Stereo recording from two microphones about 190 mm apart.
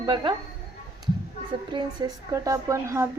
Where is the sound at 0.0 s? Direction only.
25° right (ahead or behind).